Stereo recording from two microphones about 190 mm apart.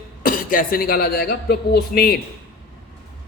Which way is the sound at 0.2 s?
45° left (ahead or behind).